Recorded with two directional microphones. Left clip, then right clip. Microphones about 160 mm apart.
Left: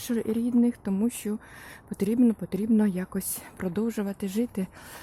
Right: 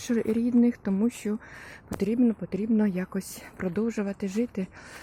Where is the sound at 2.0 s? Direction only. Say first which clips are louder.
Left 1 dB; 20° left (ahead or behind).